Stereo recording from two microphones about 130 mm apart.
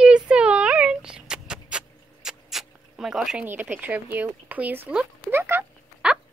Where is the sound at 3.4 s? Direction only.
15° right (ahead or behind).